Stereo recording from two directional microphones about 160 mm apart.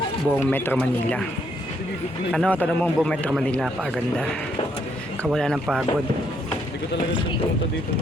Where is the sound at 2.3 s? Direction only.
5° left (ahead or behind).